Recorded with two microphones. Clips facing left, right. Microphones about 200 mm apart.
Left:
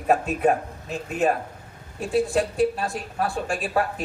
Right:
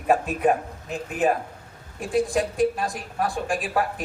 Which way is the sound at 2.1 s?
15° right (ahead or behind).